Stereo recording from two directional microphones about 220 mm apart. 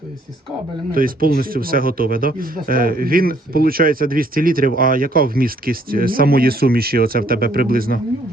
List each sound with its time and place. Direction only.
0.9 s speech: 40° right (ahead or behind)